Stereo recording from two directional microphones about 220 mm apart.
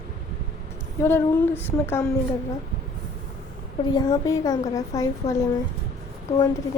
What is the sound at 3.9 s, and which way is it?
A woman's voice, 15° left (ahead or behind).